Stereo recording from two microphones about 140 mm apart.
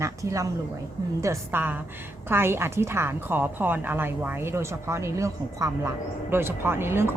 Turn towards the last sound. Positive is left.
turn(degrees=-15)  # may be behind; listen again after turning